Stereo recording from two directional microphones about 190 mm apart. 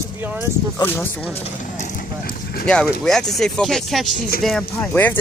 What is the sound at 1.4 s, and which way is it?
Vehicle, 40° left (ahead or behind).